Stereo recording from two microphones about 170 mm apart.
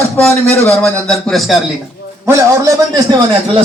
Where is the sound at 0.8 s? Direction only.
5° left (ahead or behind).